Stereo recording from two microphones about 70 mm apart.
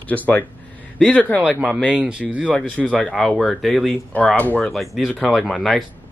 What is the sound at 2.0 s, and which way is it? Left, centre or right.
Speech, centre.